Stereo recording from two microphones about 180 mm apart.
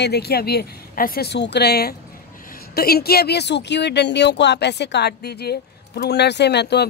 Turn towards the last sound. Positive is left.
turn(degrees=65)  # may be behind; listen again after turning